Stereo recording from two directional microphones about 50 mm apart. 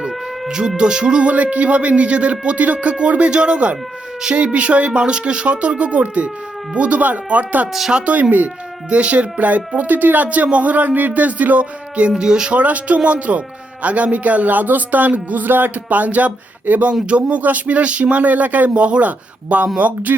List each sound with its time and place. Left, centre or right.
0.4 s music: centre
0.8 s speech: centre
7.7 s speech: centre
7.9 s speech: right
12.1 s speech: centre; by 20.1 s right